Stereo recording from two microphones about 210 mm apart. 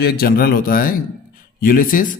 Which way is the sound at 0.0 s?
45° left (ahead or behind).